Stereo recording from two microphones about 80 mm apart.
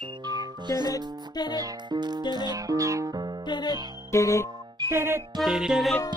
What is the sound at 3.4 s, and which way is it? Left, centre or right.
Music, left.